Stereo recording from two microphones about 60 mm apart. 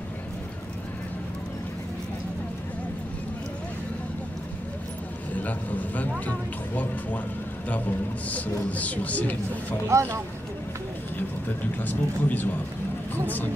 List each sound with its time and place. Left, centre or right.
5.3 s vehicle: left
7.7 s a man's voice: left
9.8 s speech: right
11.4 s speech: left